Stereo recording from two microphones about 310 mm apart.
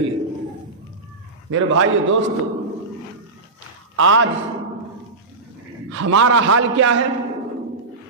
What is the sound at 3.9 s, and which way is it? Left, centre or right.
Speech, right.